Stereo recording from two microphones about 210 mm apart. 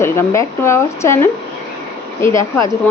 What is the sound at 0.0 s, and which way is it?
Speech, 10° left (ahead or behind).